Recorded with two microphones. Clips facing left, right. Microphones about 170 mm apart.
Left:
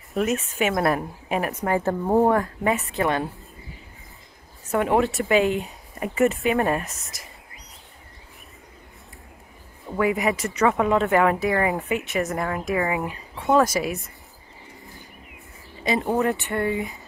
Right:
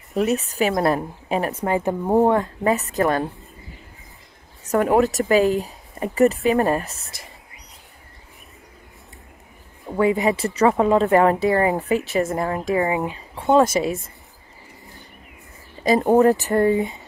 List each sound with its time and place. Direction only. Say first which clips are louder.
0.3 s speech: right 3 dB; 35° right (ahead or behind)
1.7 s speech: right 1 dB; 15° right (ahead or behind)
2.7 s speech: right 4 dB; 40° right (ahead or behind)
5.0 s speech: right 3 dB; 40° right (ahead or behind)
9.9 s speech: right 3 dB; 30° right (ahead or behind)
15.8 s speech: right 7 dB; 40° right (ahead or behind)